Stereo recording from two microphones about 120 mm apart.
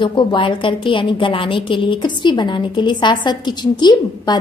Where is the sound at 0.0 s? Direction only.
40° left (ahead or behind).